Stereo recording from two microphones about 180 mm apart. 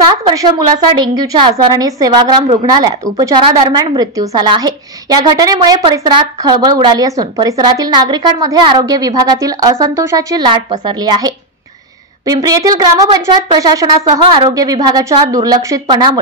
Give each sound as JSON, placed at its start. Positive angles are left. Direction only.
{"t": 0.1, "sound": "a woman's voice", "side_deg": -20}
{"t": 12.4, "sound": "a woman's voice", "side_deg": -20}